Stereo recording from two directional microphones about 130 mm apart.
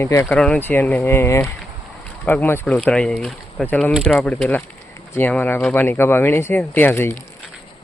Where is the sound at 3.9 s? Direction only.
5° left (ahead or behind); by 7.2 s 20° left (ahead or behind).